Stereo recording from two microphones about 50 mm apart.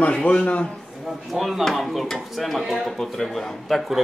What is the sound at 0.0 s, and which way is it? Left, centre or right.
Speech, left.